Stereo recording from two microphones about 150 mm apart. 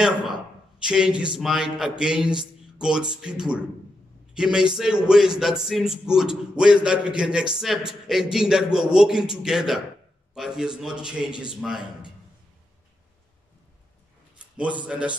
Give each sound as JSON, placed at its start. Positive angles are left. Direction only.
{"t": 0.7, "sound": "a man's voice", "side_deg": -5}
{"t": 14.6, "sound": "a man's voice", "side_deg": -10}